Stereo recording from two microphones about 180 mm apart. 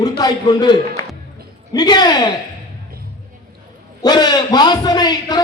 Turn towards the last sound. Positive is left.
turn(degrees=25)  # may be behind; listen again after turning